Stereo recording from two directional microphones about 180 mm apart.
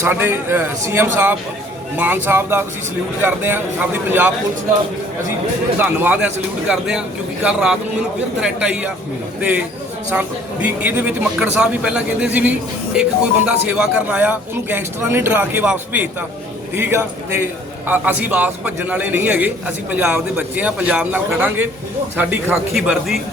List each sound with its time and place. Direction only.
0.0 s speech: 10° right (ahead or behind)
5.8 s a man's voice: 10° right (ahead or behind)